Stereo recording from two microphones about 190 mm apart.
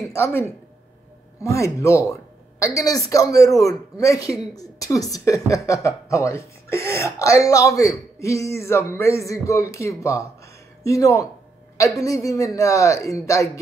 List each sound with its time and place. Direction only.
0.1 s speech: 10° left (ahead or behind)